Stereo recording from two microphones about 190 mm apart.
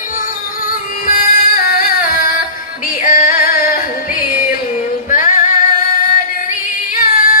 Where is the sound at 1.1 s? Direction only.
50° left (ahead or behind).